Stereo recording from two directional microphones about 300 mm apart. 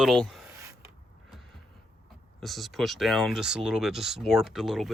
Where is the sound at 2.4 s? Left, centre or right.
Centre.